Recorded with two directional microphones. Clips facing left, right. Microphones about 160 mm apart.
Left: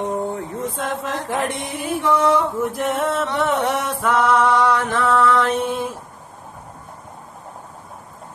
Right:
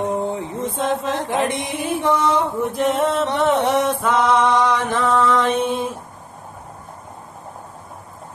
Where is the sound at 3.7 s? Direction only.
20° right (ahead or behind).